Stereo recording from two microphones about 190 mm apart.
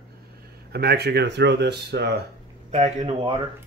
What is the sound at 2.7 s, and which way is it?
Speech, 35° right (ahead or behind).